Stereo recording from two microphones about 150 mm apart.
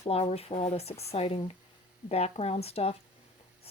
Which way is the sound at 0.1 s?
45° left (ahead or behind).